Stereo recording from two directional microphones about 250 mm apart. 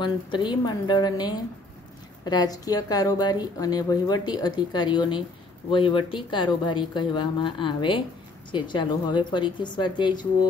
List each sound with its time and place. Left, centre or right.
0.0 s speech: centre